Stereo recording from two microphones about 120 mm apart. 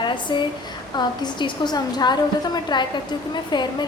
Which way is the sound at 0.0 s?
40° left (ahead or behind).